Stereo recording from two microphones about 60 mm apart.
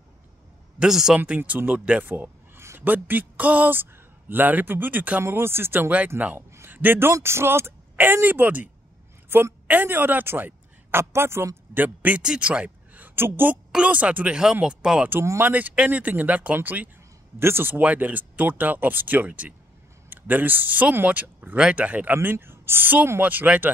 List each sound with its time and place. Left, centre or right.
0.7 s speech: centre
1.2 s speech: right
5.2 s a man's voice: right
7.2 s speech: right
9.3 s speech: right
11.7 s speech: right
12.2 s speech: centre; by 13.5 s right
13.7 s speech: centre
15.4 s speech: right
17.4 s speech: right
22.1 s speech: right